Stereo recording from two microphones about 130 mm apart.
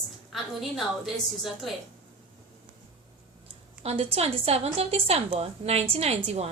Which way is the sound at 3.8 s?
50° right (ahead or behind).